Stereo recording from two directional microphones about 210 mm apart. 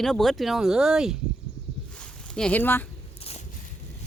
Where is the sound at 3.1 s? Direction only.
30° left (ahead or behind).